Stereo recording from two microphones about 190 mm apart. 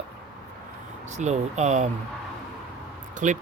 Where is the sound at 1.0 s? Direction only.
40° right (ahead or behind).